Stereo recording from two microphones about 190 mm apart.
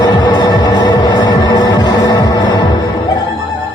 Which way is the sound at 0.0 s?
20° left (ahead or behind).